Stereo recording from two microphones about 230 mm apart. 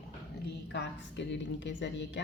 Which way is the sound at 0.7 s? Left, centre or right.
Left.